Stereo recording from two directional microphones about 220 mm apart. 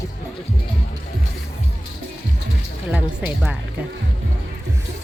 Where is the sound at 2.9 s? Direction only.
5° right (ahead or behind).